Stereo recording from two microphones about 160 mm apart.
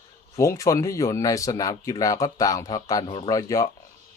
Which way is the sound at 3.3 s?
20° left (ahead or behind).